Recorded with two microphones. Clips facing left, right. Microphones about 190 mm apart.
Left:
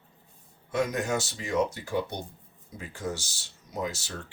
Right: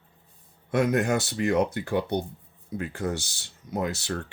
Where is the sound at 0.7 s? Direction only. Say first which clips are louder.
Right 5 dB; 60° right (ahead or behind).